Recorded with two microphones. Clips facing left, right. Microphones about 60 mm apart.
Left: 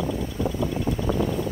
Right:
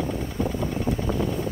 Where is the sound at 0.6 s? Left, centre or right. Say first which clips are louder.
Left 1 dB; right.